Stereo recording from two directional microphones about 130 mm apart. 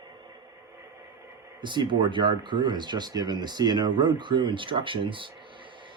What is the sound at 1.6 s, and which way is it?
Speech, 35° right (ahead or behind).